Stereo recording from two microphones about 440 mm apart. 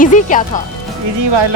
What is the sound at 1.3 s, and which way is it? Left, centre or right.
Speech, right.